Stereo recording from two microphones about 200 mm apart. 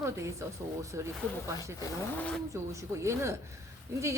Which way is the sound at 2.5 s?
15° right (ahead or behind).